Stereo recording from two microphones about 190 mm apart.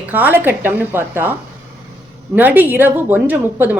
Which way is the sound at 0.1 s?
10° right (ahead or behind).